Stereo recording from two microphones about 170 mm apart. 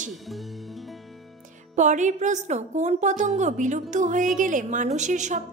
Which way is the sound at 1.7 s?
45° right (ahead or behind).